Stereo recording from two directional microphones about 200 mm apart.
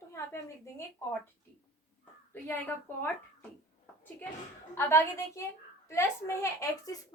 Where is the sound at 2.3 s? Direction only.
10° left (ahead or behind).